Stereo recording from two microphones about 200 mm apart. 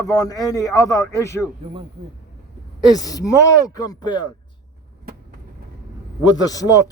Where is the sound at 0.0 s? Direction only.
20° left (ahead or behind).